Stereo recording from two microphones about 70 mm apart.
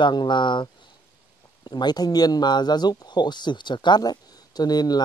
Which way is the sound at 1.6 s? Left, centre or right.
Left.